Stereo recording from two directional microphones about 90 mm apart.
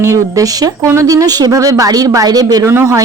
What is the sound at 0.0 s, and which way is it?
A woman's voice, 35° right (ahead or behind).